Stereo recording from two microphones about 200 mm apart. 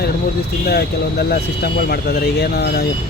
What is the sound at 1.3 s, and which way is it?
Speech, 55° left (ahead or behind).